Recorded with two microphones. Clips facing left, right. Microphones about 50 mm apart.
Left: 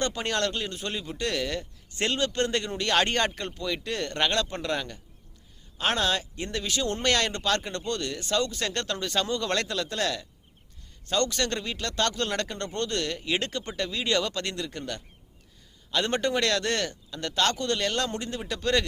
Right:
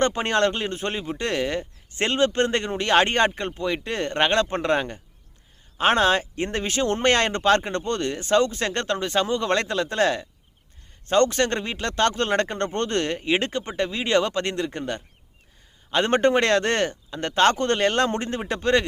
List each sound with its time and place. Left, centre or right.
0.0 s speech: right